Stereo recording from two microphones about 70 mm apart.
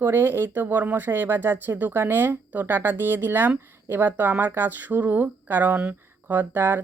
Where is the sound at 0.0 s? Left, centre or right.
Right.